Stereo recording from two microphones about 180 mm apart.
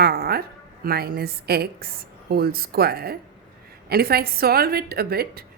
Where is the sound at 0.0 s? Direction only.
60° right (ahead or behind).